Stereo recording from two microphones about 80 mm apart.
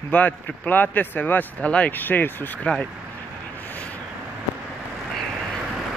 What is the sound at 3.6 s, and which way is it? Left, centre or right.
Vehicle, left.